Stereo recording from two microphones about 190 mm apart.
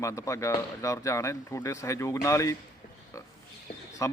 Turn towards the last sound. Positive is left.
turn(degrees=15)  # may be behind; listen again after turning